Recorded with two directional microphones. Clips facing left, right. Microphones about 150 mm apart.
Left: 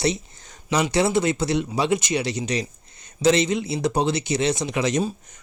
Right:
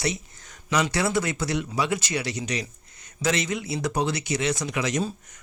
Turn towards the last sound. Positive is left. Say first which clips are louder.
# left 4 dB
turn(degrees=25)  # may be behind; listen again after turning